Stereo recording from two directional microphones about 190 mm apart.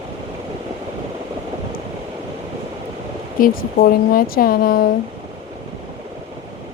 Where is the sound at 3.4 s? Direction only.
50° left (ahead or behind).